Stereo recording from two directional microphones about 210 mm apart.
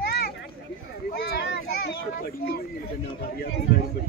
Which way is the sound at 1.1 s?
50° left (ahead or behind).